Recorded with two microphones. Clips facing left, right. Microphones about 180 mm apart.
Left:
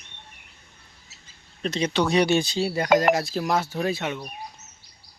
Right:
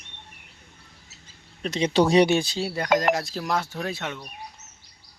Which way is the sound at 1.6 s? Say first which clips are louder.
Left 1 dB; 15° right (ahead or behind).